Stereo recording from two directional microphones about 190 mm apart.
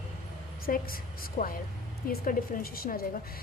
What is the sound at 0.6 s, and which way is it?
A woman's voice, 50° left (ahead or behind).